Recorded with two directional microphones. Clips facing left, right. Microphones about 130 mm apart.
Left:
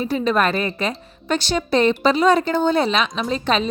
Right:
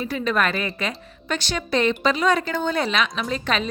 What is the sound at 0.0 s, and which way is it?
A woman's voice, 30° left (ahead or behind).